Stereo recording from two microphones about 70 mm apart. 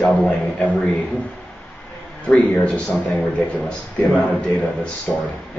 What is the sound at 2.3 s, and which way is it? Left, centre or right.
A man's voice, centre.